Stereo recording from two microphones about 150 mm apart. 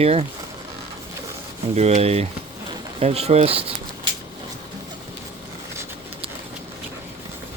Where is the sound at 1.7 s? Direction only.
45° right (ahead or behind).